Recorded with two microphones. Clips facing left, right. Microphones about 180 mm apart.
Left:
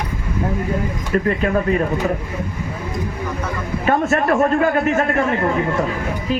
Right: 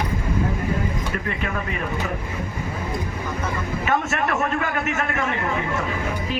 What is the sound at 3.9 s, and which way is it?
A man's voice, 35° left (ahead or behind).